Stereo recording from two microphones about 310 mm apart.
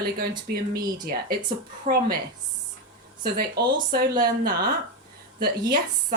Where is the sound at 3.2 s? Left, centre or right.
Right.